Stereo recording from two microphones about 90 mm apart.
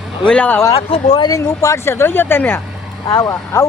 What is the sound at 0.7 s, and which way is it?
Speech, 90° left.